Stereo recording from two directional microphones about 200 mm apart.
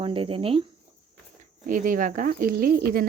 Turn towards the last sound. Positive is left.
turn(degrees=-50)  # may be behind; listen again after turning